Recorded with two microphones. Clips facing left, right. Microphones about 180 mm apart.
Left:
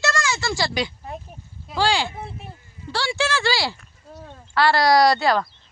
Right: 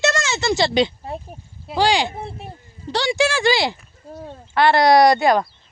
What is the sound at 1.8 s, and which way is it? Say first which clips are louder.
Speech: right 3 dB; 15° right (ahead or behind).